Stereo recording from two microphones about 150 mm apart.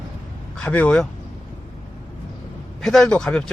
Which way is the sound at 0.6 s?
10° left (ahead or behind).